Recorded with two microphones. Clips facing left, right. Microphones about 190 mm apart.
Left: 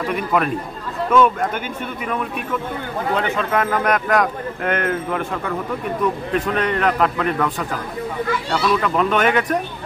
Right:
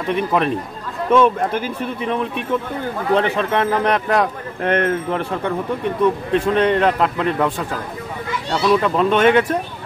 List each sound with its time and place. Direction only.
0.0 s speech: 25° right (ahead or behind)